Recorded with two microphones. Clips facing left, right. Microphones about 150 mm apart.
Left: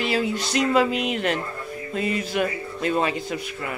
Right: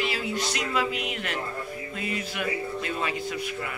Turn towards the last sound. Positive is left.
turn(degrees=35)  # may be behind; listen again after turning